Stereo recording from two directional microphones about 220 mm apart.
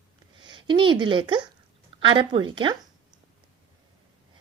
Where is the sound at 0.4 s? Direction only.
20° right (ahead or behind).